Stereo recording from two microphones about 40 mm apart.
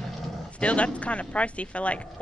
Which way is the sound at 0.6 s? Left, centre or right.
Left.